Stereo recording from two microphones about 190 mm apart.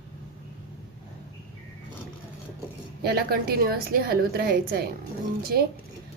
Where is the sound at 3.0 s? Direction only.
55° right (ahead or behind).